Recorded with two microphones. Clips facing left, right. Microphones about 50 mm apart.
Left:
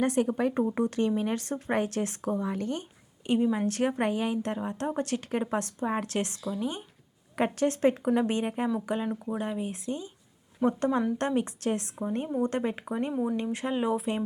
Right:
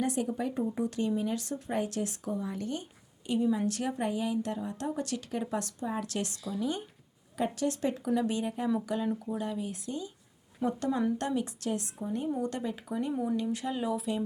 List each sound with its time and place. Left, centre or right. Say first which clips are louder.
0.0 s a woman's voice: left 5 dB; left
7.3 s a woman's voice: left 4 dB; left